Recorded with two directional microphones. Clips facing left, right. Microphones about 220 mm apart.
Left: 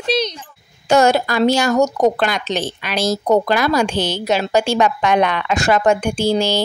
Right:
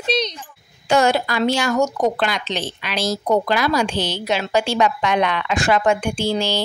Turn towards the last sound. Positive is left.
turn(degrees=40)  # may be behind; listen again after turning